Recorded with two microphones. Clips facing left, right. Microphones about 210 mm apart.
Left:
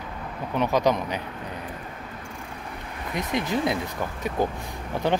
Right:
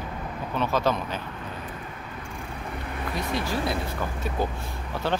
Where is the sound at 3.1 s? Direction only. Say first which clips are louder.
Left 3 dB; 20° left (ahead or behind).